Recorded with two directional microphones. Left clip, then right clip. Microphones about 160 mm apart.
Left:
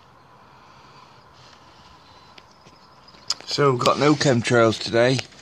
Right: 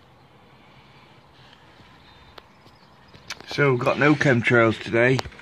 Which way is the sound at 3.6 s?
5° left (ahead or behind).